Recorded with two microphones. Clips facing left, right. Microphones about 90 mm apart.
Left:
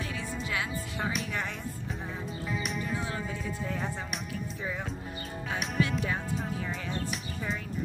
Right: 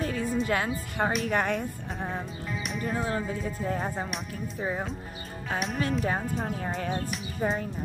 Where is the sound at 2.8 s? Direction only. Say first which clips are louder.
Right 5 dB; 40° right (ahead or behind).